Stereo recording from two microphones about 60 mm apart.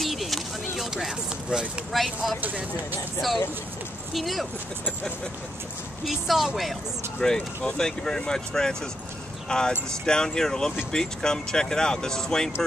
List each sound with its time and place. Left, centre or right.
0.0 s a sound: centre
1.9 s speech: centre
2.4 s speech: right
4.1 s speech: centre
6.0 s speech: centre
7.2 s speech: centre